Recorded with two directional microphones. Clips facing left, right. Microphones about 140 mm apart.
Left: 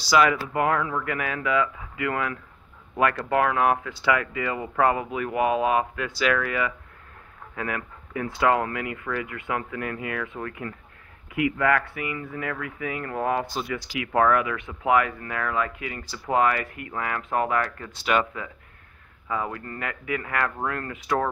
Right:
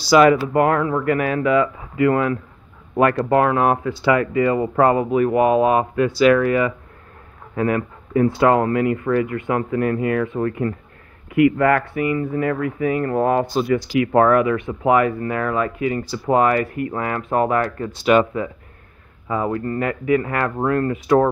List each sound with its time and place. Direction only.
0.1 s speech: 40° right (ahead or behind)
11.3 s speech: 50° right (ahead or behind); by 21.3 s 35° right (ahead or behind)